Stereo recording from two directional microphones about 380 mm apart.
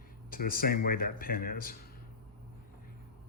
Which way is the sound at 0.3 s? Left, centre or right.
Left.